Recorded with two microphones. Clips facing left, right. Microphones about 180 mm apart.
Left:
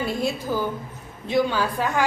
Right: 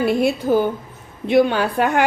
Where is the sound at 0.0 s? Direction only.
65° right (ahead or behind).